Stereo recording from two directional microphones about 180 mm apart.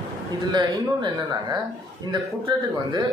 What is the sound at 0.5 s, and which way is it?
A man's voice, 25° right (ahead or behind).